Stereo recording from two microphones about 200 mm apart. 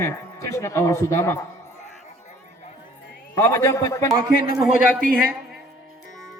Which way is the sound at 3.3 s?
15° left (ahead or behind).